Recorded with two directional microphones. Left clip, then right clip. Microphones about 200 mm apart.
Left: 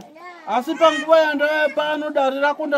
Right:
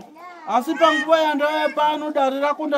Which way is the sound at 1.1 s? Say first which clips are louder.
Left 2 dB; 15° right (ahead or behind).